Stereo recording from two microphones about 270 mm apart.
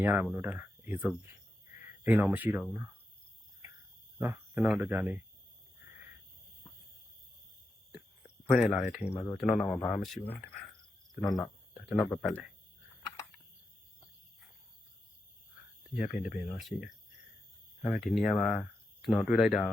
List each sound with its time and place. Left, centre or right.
0.0 s speech: centre
4.2 s speech: centre
8.5 s speech: centre
11.2 s cricket: centre
11.9 s speech: centre
16.4 s speech: centre
17.9 s speech: centre